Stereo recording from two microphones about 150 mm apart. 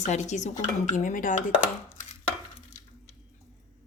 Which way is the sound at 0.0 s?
50° left (ahead or behind).